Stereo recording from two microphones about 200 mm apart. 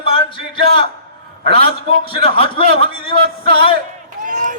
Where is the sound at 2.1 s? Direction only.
25° left (ahead or behind).